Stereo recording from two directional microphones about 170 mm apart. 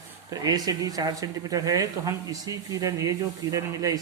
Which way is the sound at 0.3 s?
20° right (ahead or behind).